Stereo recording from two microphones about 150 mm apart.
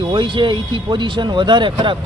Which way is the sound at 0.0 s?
35° right (ahead or behind).